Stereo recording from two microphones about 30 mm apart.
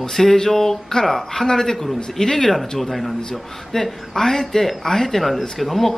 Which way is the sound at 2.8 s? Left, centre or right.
Centre.